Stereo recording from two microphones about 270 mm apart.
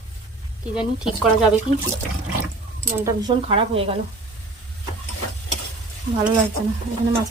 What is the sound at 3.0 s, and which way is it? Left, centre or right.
Speech, centre.